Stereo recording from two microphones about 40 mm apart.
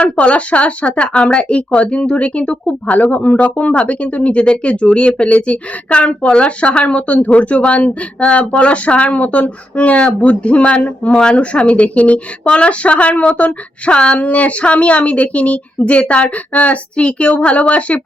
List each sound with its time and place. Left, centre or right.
0.0 s speech: left
2.8 s speech: left